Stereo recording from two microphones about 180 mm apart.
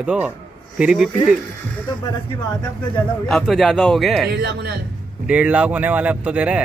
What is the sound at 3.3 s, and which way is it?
Speech, centre (ahead or behind).